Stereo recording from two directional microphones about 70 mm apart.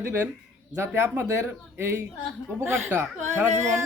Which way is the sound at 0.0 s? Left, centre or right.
Right.